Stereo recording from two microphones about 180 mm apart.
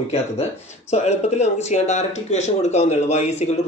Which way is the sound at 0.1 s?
35° left (ahead or behind).